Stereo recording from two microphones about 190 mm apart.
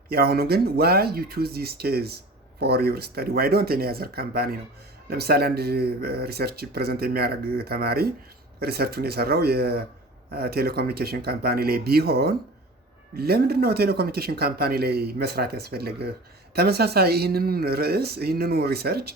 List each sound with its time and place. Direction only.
0.1 s speech: 55° right (ahead or behind)